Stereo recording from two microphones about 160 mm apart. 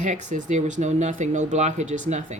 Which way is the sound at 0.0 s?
50° right (ahead or behind).